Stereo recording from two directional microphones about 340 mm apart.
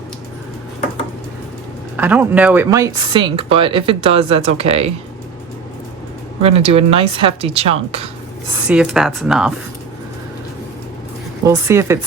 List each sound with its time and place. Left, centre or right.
2.0 s speech: centre
6.4 s speech: centre
8.6 s speech: centre
11.4 s speech: centre